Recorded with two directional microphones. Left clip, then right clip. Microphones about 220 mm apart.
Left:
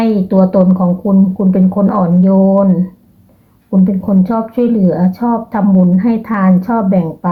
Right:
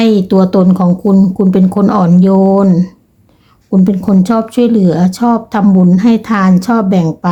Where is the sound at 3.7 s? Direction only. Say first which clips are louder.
Right 2 dB; 40° right (ahead or behind).